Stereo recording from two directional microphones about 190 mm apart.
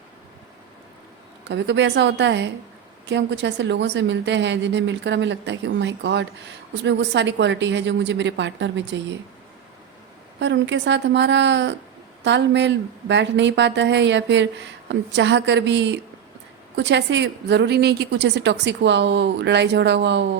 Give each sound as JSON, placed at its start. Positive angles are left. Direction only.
{"t": 1.5, "sound": "a woman's voice", "side_deg": -65}
{"t": 10.4, "sound": "a woman's voice", "side_deg": -70}